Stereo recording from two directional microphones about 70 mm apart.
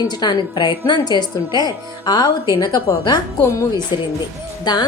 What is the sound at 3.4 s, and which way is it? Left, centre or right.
Speech, left.